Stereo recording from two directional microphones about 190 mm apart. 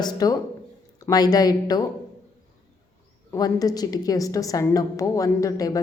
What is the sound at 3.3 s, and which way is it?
A woman's voice, 20° left (ahead or behind).